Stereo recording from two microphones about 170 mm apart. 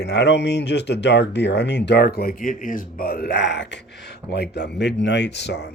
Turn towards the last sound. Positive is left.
turn(degrees=80)